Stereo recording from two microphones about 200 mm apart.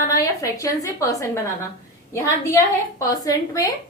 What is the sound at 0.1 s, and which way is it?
A woman's voice, 15° left (ahead or behind).